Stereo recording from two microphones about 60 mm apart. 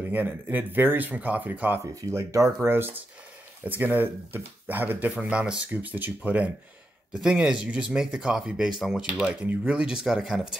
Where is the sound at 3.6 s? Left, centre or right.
Right.